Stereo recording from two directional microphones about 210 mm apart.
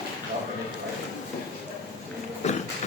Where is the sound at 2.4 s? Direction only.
30° left (ahead or behind).